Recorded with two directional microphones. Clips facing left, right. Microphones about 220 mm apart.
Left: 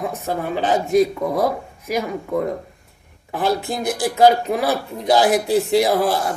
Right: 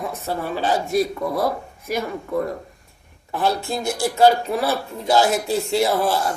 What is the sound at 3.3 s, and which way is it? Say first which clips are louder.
Speech: left 1 dB; 20° left (ahead or behind).